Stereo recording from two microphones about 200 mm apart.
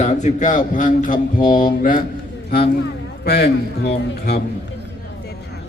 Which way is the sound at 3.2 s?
50° left (ahead or behind).